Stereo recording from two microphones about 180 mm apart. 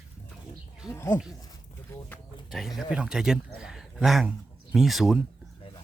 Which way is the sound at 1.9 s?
15° left (ahead or behind).